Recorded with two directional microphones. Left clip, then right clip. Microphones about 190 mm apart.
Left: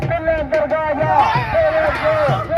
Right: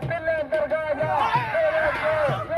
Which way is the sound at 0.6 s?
35° right (ahead or behind).